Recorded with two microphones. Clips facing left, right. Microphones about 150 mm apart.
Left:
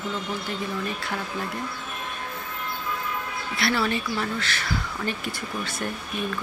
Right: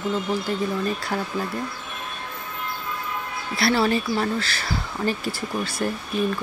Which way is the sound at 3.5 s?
35° right (ahead or behind).